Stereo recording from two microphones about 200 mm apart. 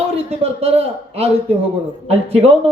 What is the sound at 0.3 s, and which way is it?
Speech, 30° right (ahead or behind).